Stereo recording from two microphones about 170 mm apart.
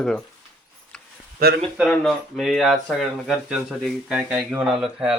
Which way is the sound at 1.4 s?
60° right (ahead or behind).